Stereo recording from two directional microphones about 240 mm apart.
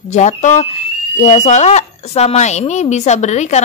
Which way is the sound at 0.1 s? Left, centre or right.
Left.